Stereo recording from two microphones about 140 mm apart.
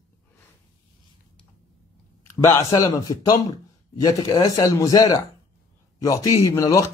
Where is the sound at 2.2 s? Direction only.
20° left (ahead or behind).